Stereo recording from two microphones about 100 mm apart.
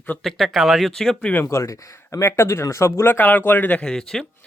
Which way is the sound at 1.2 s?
20° left (ahead or behind).